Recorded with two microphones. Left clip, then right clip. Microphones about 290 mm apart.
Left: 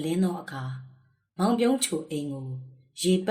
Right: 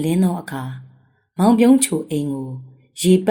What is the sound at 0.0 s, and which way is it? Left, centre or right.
A woman's voice, right.